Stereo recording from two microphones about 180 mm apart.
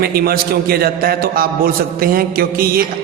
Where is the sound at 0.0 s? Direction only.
60° right (ahead or behind).